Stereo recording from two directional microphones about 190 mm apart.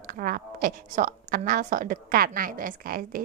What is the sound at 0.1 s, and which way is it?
A woman's voice, 50° right (ahead or behind).